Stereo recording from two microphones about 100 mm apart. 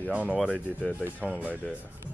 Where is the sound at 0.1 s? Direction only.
15° right (ahead or behind).